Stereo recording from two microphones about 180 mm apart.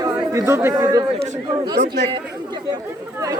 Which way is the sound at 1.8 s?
70° right (ahead or behind).